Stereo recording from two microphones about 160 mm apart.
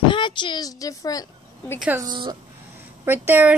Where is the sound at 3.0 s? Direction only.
15° right (ahead or behind).